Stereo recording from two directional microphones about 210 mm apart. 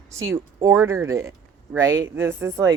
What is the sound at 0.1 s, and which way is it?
Speech, 15° right (ahead or behind).